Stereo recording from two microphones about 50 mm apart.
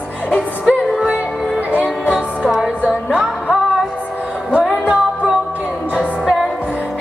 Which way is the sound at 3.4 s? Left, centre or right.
Right.